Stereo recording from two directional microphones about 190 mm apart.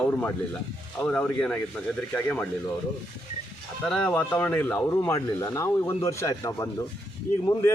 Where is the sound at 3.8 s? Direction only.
5° left (ahead or behind).